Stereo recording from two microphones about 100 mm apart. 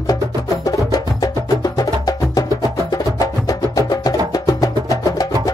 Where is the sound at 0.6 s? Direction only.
40° left (ahead or behind).